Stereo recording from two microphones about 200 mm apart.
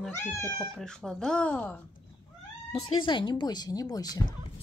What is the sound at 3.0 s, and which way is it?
Speech, 25° left (ahead or behind).